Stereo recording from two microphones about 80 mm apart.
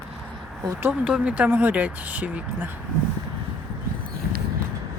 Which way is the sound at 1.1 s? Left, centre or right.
Centre.